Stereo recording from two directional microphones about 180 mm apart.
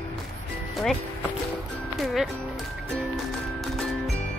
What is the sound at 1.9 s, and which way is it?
Speech, centre (ahead or behind).